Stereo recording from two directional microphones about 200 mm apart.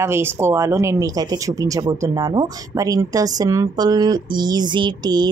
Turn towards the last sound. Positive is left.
turn(degrees=-20)  # may be behind; listen again after turning